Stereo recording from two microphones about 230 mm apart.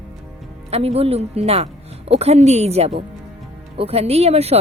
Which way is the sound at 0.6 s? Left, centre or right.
Right.